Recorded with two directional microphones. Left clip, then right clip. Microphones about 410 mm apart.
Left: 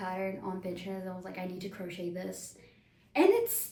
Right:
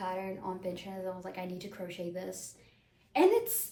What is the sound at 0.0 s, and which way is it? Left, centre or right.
A woman's voice, centre.